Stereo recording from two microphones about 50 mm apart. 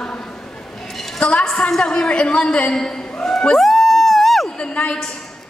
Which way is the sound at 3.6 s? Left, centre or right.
Centre.